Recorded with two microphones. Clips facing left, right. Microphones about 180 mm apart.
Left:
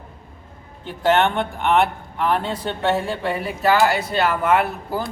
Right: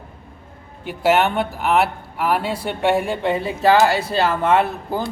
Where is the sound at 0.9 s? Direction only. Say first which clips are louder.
Right 1 dB; 10° right (ahead or behind).